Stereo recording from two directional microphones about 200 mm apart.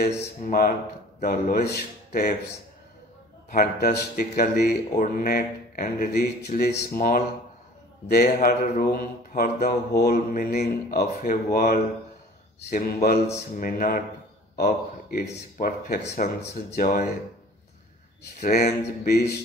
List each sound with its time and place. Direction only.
0.5 s speech: 45° left (ahead or behind)
3.5 s a man's voice: 50° left (ahead or behind)
18.4 s speech: 50° left (ahead or behind)